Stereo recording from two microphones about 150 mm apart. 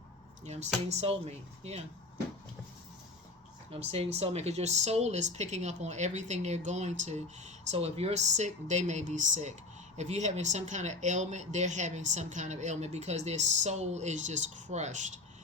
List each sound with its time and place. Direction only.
0.4 s speech: 50° right (ahead or behind)
3.7 s speech: 45° right (ahead or behind)